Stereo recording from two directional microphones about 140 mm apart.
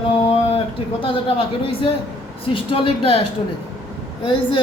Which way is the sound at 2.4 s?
40° left (ahead or behind).